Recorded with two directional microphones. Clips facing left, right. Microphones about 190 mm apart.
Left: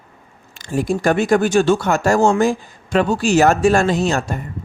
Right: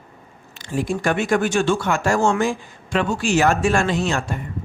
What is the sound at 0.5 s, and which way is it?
Speech, 40° left (ahead or behind).